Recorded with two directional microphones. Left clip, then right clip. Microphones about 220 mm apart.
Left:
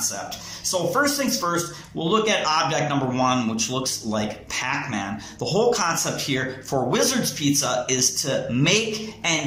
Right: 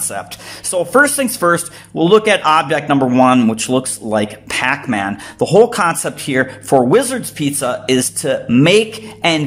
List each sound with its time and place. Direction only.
0.7 s speech: 50° right (ahead or behind)